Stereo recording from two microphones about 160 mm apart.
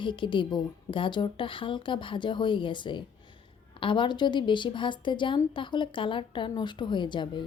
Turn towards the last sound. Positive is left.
turn(degrees=30)  # may be behind; listen again after turning